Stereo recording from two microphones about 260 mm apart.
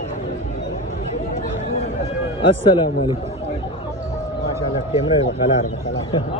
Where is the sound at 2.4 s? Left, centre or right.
Centre.